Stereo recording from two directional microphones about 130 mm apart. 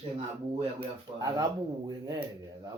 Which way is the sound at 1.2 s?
30° right (ahead or behind).